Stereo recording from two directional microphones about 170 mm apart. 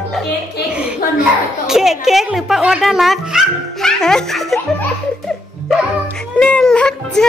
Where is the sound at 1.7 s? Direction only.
Centre (ahead or behind).